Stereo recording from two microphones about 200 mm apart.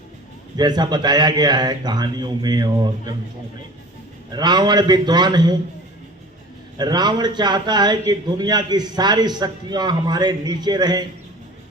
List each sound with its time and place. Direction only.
0.5 s a man's voice: 20° right (ahead or behind)
4.3 s a man's voice: 20° right (ahead or behind)
6.7 s a man's voice: 20° right (ahead or behind)